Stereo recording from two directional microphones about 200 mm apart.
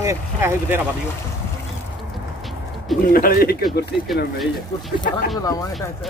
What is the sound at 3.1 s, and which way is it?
Speech, 45° left (ahead or behind).